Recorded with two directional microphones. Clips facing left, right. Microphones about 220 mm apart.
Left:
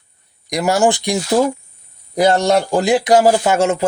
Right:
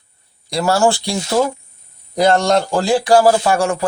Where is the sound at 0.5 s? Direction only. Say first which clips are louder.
Even; 15° left (ahead or behind).